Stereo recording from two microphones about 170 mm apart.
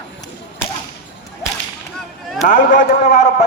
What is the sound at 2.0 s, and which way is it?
Whip, centre (ahead or behind).